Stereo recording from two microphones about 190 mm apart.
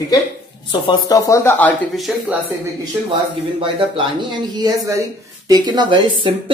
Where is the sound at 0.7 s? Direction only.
20° left (ahead or behind).